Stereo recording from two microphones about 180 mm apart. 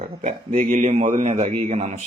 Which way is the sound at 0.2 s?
45° right (ahead or behind).